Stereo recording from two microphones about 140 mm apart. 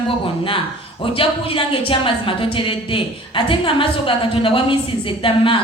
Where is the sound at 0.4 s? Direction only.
40° left (ahead or behind).